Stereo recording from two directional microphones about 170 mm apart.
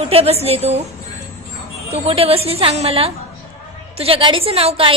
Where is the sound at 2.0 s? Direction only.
35° right (ahead or behind).